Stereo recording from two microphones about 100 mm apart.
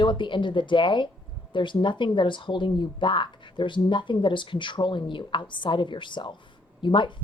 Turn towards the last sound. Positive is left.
turn(degrees=55)  # may be behind; listen again after turning